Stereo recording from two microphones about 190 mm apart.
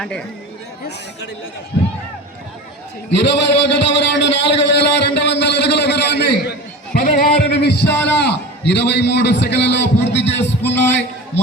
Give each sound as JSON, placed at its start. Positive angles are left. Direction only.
{"t": 0.0, "sound": "speech", "side_deg": 5}
{"t": 1.7, "sound": "speech", "side_deg": 60}
{"t": 3.2, "sound": "a sound", "side_deg": 65}
{"t": 6.9, "sound": "a man's voice", "side_deg": 50}